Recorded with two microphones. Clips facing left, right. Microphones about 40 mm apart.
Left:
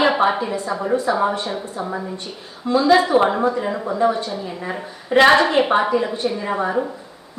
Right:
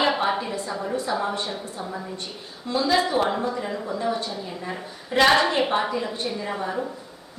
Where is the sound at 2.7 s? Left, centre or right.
Left.